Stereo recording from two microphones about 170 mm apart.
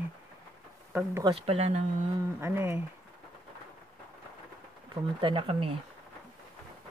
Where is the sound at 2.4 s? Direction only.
15° right (ahead or behind).